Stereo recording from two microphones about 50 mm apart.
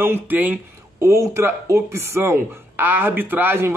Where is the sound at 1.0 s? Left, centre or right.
Right.